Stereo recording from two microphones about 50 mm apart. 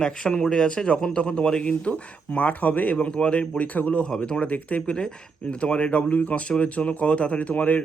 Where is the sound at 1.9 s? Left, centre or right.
Left.